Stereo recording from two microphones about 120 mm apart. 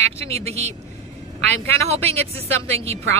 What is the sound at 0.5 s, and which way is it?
Speech, 65° right (ahead or behind).